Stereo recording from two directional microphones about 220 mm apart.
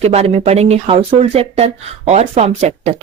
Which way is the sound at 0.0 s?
30° right (ahead or behind).